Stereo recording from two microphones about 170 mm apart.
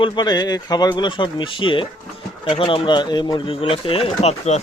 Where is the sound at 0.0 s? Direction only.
25° left (ahead or behind).